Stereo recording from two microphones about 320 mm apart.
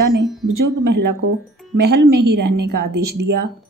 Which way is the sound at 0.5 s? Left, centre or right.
Right.